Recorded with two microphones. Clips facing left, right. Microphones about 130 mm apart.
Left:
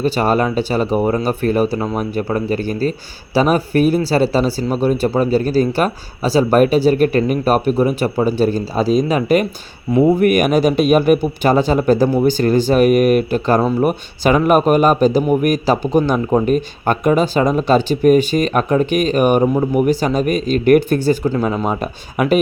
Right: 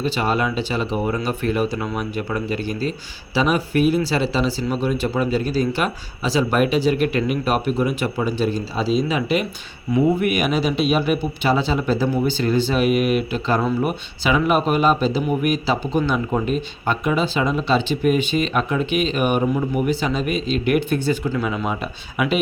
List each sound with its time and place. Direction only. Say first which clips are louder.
0.0 s speech: left 5 dB; 45° left (ahead or behind)